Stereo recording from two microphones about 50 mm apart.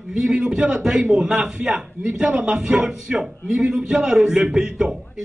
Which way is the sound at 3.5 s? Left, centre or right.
Right.